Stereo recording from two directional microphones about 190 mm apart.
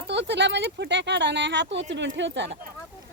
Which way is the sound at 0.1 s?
65° right (ahead or behind).